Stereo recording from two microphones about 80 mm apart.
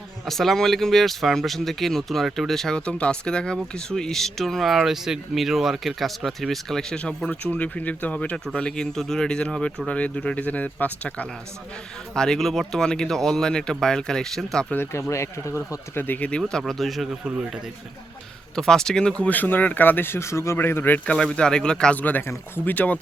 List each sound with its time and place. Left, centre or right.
0.3 s speech: centre
14.7 s speech: left
16.5 s speech: centre
18.5 s speech: centre; by 21.0 s left
21.0 s speech: centre